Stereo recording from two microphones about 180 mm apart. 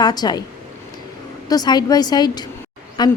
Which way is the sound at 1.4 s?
20° left (ahead or behind).